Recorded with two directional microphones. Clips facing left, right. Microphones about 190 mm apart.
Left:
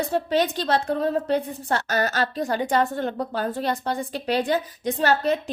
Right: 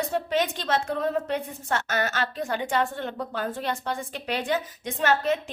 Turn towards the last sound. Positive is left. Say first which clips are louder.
# left 3 dB
turn(degrees=35)  # may be behind; listen again after turning